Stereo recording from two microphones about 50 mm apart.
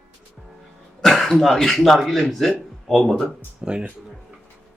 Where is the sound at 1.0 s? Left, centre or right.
Centre.